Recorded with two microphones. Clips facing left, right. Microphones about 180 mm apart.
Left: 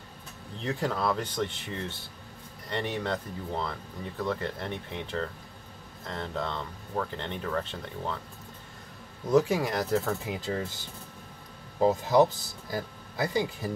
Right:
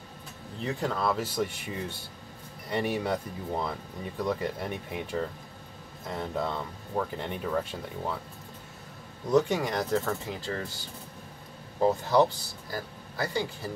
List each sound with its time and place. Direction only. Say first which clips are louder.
0.6 s speech: even; centre (ahead or behind)
9.3 s speech: left 1 dB; centre (ahead or behind)
11.8 s speech: left 1 dB; 15° left (ahead or behind)